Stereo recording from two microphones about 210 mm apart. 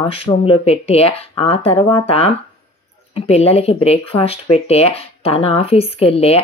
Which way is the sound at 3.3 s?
30° left (ahead or behind).